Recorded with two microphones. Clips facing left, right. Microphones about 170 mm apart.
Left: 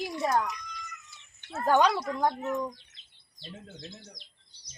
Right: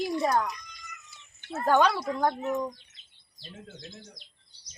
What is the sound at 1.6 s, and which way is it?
Speech, 15° left (ahead or behind).